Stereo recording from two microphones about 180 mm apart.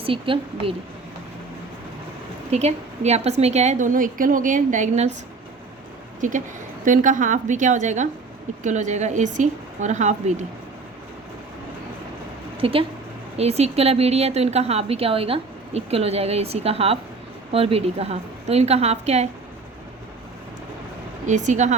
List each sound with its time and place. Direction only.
0.0 s a woman's voice: 30° right (ahead or behind)
2.5 s a woman's voice: 35° right (ahead or behind)
6.1 s a woman's voice: 45° right (ahead or behind)
12.5 s a woman's voice: 30° right (ahead or behind)
21.2 s a woman's voice: 40° right (ahead or behind)